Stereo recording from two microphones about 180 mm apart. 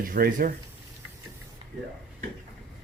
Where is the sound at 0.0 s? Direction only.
50° right (ahead or behind).